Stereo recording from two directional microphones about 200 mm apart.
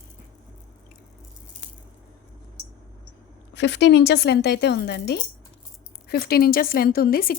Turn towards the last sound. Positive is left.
turn(degrees=45)  # may be behind; listen again after turning